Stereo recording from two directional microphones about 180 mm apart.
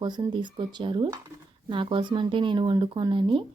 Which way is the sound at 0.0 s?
25° right (ahead or behind).